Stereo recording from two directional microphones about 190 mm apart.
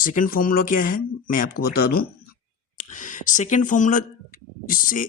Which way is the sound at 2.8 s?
40° left (ahead or behind).